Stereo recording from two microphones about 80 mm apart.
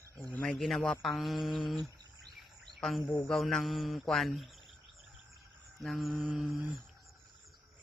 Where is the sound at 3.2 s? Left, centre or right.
Centre.